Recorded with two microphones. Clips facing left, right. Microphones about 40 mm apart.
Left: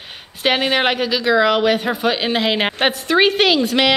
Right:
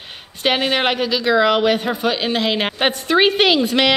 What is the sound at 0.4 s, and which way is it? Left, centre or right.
Speech, centre.